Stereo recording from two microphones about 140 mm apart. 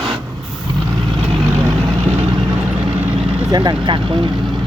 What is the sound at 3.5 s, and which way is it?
Speech, 30° right (ahead or behind).